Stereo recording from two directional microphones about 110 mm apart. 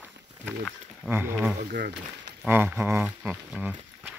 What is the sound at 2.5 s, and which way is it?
Speech, 20° right (ahead or behind).